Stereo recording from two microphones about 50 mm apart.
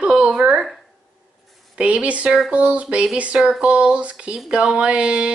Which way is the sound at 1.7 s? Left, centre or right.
Right.